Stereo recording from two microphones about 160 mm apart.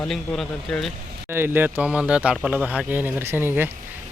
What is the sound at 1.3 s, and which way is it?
A man's voice, 15° right (ahead or behind).